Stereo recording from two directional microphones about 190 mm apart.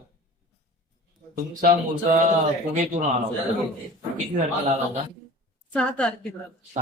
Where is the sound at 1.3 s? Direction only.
45° right (ahead or behind).